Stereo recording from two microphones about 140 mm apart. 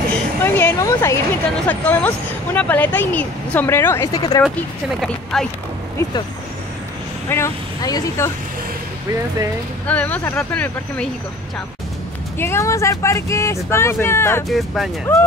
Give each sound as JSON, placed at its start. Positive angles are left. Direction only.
{"t": 0.4, "sound": "a woman's voice", "side_deg": 15}
{"t": 4.6, "sound": "speech", "side_deg": 5}
{"t": 6.0, "sound": "speech", "side_deg": 20}
{"t": 7.2, "sound": "speech", "side_deg": 20}
{"t": 9.8, "sound": "a woman's voice", "side_deg": 10}
{"t": 12.4, "sound": "speech", "side_deg": 20}
{"t": 14.5, "sound": "speech", "side_deg": 0}
{"t": 15.1, "sound": "a woman's voice", "side_deg": 15}